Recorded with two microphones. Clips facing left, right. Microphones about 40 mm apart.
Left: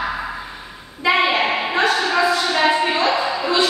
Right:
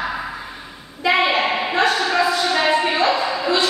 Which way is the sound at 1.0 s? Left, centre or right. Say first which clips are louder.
Even; centre.